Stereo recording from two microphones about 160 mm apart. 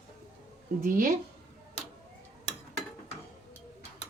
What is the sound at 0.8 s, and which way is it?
Speech, 60° right (ahead or behind).